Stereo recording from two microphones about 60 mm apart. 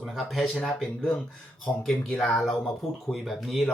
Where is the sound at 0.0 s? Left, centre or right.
Centre.